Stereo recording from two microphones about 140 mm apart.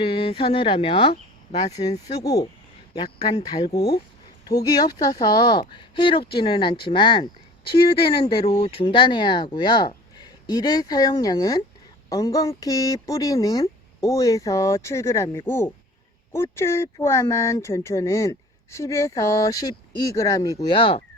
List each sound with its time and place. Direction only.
0.0 s speech: 40° left (ahead or behind)
2.0 s speech: 25° left (ahead or behind)
20.7 s speech: 40° left (ahead or behind)